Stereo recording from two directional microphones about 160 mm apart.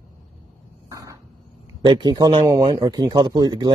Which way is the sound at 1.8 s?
30° right (ahead or behind).